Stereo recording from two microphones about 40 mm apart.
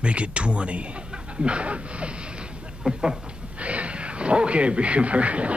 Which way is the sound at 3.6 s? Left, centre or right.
Right.